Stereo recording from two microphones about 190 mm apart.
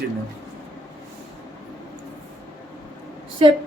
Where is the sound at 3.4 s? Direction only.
30° right (ahead or behind).